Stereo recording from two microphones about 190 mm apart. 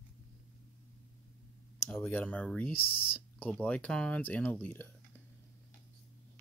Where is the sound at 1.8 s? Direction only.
10° left (ahead or behind).